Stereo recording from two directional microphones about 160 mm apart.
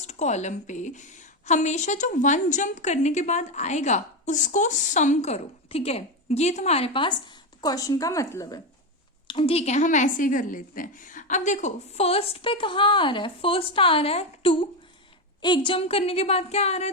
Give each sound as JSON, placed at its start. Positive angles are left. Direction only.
{"t": 0.1, "sound": "a woman's voice", "side_deg": 45}
{"t": 9.2, "sound": "a woman's voice", "side_deg": 35}